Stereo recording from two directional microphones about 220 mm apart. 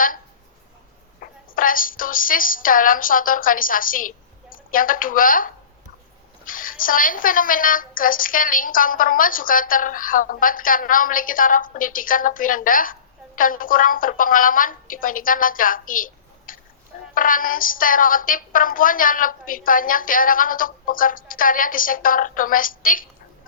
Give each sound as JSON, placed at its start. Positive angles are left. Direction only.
{"t": 1.2, "sound": "a woman's voice", "side_deg": 40}